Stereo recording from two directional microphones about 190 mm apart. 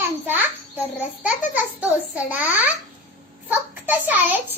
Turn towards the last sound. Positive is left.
turn(degrees=-10)  # may be behind; listen again after turning